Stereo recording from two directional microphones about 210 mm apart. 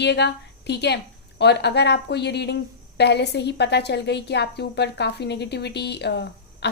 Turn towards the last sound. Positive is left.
turn(degrees=55)  # may be behind; listen again after turning